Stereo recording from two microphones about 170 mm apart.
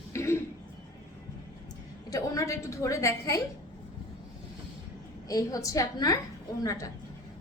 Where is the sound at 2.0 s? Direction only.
20° left (ahead or behind).